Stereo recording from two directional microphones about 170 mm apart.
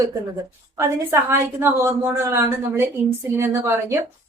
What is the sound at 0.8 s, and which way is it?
A woman's voice, 15° right (ahead or behind).